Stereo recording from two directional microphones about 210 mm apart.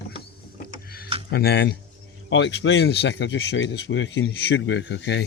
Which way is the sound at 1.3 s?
50° left (ahead or behind).